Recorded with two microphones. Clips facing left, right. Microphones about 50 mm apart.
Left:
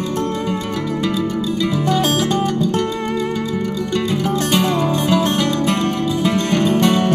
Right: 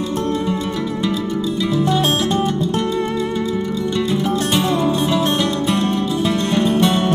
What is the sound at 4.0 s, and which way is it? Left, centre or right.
Music, left.